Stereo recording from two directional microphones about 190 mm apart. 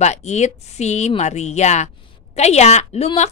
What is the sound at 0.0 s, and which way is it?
A woman's voice, 35° left (ahead or behind).